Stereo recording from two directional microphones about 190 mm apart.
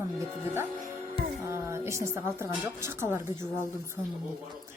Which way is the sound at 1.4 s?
15° right (ahead or behind).